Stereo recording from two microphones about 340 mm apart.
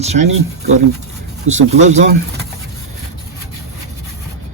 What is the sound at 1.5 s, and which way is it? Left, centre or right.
Speech, right.